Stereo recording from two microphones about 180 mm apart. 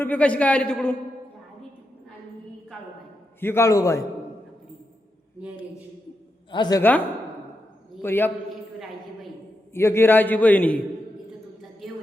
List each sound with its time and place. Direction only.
0.0 s a man's voice: 10° left (ahead or behind)
3.4 s a man's voice: 15° left (ahead or behind)
6.5 s a woman's voice: 25° left (ahead or behind)
8.0 s a man's voice: 10° left (ahead or behind)
9.7 s a man's voice: 15° left (ahead or behind)